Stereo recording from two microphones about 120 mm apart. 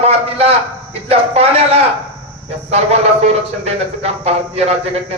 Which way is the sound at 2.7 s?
60° right (ahead or behind).